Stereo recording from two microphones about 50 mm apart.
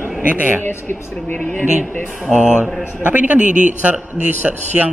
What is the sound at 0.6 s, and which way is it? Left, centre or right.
Speech, left.